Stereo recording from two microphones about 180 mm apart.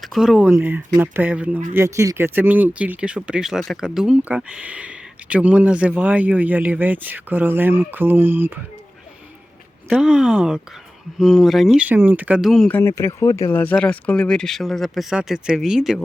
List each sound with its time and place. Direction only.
0.0 s speech: centre (ahead or behind)
9.9 s speech: 5° right (ahead or behind)
12.7 s speech: 15° left (ahead or behind); by 16.0 s centre (ahead or behind)